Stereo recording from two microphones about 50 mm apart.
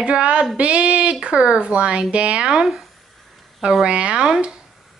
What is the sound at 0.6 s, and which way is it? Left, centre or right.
Speech, right.